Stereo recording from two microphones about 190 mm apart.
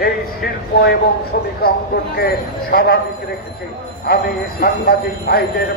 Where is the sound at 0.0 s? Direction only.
55° left (ahead or behind).